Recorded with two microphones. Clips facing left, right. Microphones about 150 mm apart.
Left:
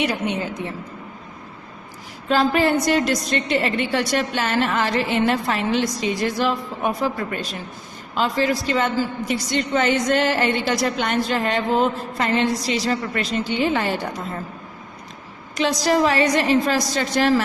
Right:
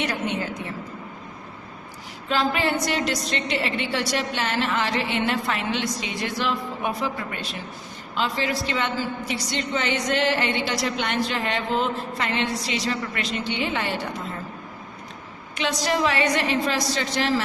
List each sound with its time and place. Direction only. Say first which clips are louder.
0.0 s a woman's voice: left 3 dB; 10° left (ahead or behind)
2.3 s a woman's voice: left 5 dB; 40° left (ahead or behind)
8.1 s a woman's voice: left 5 dB; 45° left (ahead or behind)
15.5 s a woman's voice: left 5 dB; 40° left (ahead or behind)